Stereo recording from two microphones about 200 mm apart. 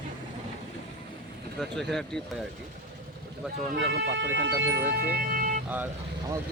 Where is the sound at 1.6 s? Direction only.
Centre (ahead or behind).